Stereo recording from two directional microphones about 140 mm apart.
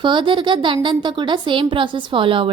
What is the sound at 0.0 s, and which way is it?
A woman's voice, 35° right (ahead or behind).